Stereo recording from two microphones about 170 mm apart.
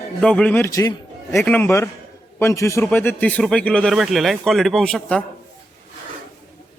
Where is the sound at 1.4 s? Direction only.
10° left (ahead or behind).